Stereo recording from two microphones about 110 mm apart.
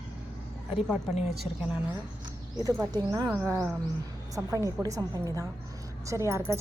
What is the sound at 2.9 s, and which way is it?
Speech, 35° right (ahead or behind).